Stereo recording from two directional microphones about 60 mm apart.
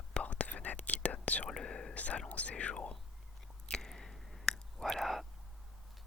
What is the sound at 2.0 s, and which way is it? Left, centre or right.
Whispering, left.